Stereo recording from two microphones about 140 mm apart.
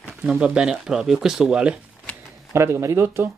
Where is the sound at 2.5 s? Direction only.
20° right (ahead or behind).